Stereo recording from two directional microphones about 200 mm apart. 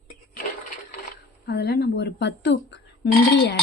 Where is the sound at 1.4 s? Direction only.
55° left (ahead or behind).